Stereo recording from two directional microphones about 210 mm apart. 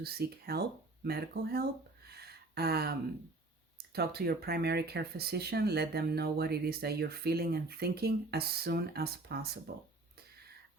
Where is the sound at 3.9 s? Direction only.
50° right (ahead or behind).